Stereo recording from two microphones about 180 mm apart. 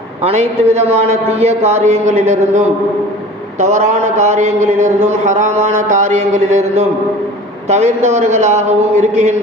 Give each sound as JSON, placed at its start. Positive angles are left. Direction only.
{"t": 0.2, "sound": "a man's voice", "side_deg": -35}